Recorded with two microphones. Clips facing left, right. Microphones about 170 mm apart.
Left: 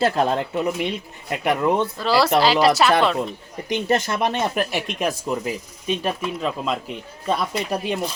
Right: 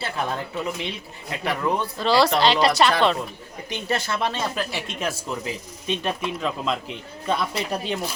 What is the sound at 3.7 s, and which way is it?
A man's voice, 20° left (ahead or behind).